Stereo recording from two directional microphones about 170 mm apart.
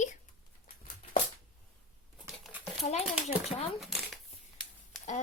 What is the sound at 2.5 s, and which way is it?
Dog, 10° right (ahead or behind).